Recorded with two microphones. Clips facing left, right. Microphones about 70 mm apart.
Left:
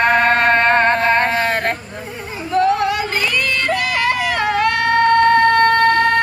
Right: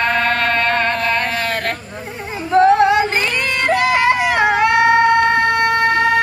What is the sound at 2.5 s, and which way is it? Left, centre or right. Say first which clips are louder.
Music: right 5 dB; right.